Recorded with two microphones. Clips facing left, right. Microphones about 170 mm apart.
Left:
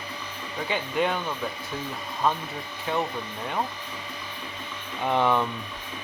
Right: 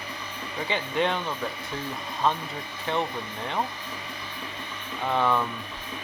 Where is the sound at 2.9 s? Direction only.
5° left (ahead or behind).